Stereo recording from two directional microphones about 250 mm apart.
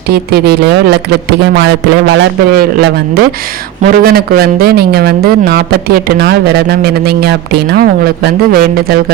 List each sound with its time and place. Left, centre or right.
0.1 s a man's voice: right